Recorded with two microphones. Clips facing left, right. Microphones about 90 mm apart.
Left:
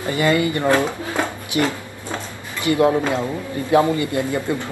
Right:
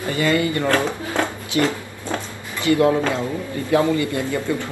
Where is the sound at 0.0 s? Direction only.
20° left (ahead or behind).